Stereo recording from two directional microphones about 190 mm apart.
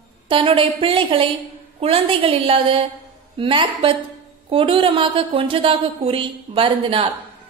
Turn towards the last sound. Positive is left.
turn(degrees=-30)  # may be behind; listen again after turning